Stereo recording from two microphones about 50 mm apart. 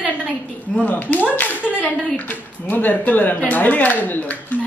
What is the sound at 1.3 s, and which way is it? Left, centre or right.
Clapping, left.